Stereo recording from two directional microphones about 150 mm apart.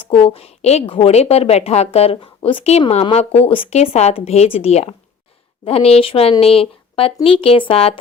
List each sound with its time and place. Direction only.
0.0 s a woman's voice: 40° left (ahead or behind)